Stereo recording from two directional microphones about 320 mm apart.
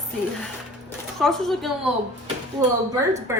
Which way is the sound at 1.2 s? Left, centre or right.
Centre.